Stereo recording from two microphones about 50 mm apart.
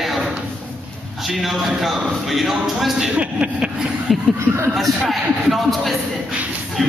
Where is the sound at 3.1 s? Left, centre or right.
Right.